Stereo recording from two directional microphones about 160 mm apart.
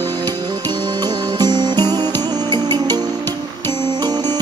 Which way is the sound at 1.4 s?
25° right (ahead or behind).